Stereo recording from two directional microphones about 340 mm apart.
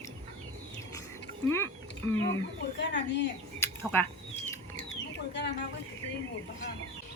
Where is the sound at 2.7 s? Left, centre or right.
Left.